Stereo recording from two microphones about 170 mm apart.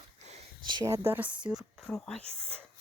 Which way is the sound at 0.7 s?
20° right (ahead or behind).